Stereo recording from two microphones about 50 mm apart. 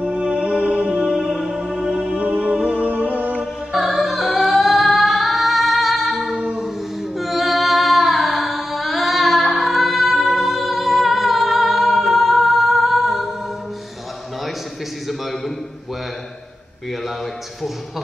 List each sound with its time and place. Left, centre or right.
0.0 s music: centre
2.0 s music: right
3.7 s music: centre
4.3 s singing: centre
6.5 s female singing: centre